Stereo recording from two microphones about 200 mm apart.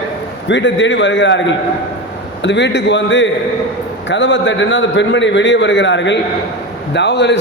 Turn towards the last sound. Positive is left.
turn(degrees=60)  # may be behind; listen again after turning